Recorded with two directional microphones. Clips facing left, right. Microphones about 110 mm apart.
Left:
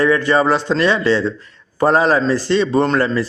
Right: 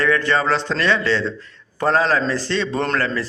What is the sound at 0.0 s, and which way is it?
A man's voice, 15° left (ahead or behind).